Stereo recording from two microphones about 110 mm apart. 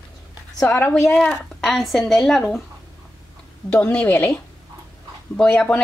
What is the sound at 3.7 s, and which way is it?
A woman's voice, 10° left (ahead or behind).